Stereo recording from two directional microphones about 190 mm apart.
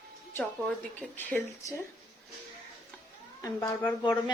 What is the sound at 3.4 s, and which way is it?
Speech, 15° left (ahead or behind).